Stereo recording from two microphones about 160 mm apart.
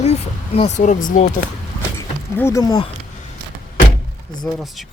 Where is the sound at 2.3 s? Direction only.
15° left (ahead or behind).